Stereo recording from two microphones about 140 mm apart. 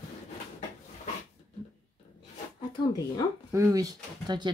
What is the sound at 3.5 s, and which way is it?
Speech, 25° right (ahead or behind).